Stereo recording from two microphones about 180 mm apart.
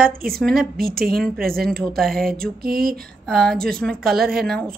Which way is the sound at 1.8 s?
Centre (ahead or behind).